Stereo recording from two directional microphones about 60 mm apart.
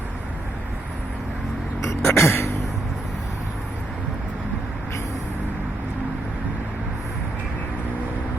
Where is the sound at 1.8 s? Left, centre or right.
Left.